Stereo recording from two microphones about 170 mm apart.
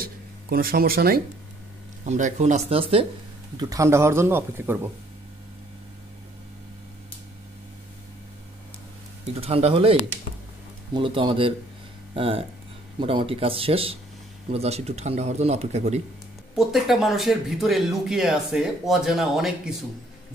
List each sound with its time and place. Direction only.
0.0 s a sound: 60° right (ahead or behind)
2.0 s speech: 45° right (ahead or behind)
3.5 s speech: 20° right (ahead or behind)
9.4 s speech: 35° right (ahead or behind)
16.5 s speech: centre (ahead or behind)